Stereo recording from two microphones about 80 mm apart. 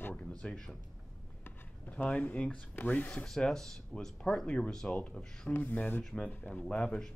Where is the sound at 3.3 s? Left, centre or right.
Centre; by 6.0 s left.